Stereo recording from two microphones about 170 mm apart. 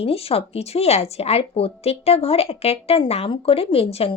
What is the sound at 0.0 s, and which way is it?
A woman's voice, 35° left (ahead or behind).